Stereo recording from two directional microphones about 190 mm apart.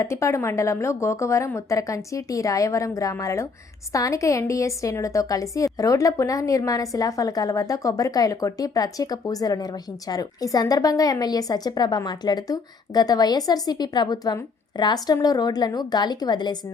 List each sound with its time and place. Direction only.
0.0 s a woman's voice: 15° left (ahead or behind)